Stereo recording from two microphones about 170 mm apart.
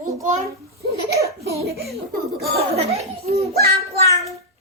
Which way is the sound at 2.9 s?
35° right (ahead or behind).